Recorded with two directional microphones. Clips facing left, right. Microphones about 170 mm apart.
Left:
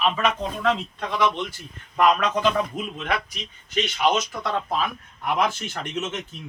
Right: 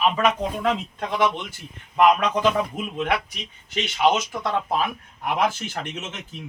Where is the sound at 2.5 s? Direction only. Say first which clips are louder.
Right 1 dB; 15° right (ahead or behind).